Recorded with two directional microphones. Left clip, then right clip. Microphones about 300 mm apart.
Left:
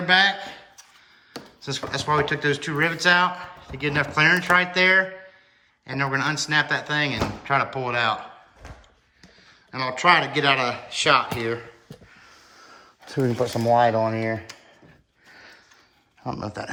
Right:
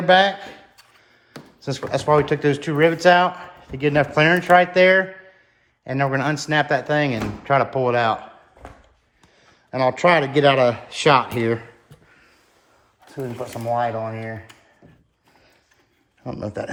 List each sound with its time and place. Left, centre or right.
0.0 s a sound: centre
1.6 s speech: centre
9.7 s speech: centre
13.1 s speech: left
16.2 s speech: centre